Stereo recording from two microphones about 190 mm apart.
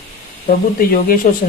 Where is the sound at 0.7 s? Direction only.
50° left (ahead or behind).